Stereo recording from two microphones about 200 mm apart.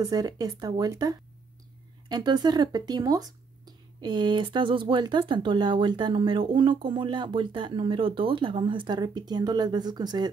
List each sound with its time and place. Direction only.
0.0 s speech: 20° right (ahead or behind)